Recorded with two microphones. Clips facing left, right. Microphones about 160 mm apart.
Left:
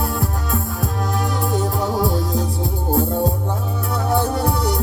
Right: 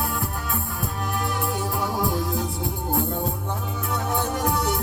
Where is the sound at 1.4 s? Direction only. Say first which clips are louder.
Left 5 dB; 40° left (ahead or behind).